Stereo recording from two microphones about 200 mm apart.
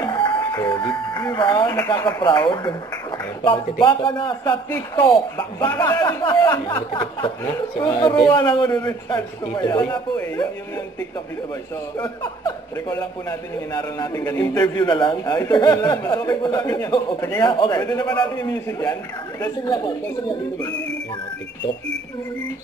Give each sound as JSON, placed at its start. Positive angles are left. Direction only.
{"t": 0.0, "sound": "music", "side_deg": 20}
{"t": 0.7, "sound": "a man's voice", "side_deg": 20}
{"t": 3.8, "sound": "a man's voice", "side_deg": 25}
{"t": 9.8, "sound": "a man's voice", "side_deg": 10}
{"t": 12.4, "sound": "a man's voice", "side_deg": 20}